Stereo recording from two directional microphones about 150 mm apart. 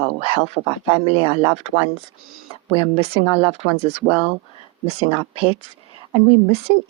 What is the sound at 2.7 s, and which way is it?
Speech, 40° right (ahead or behind).